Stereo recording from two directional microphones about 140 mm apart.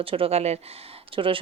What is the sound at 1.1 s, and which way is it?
Speech, 40° right (ahead or behind).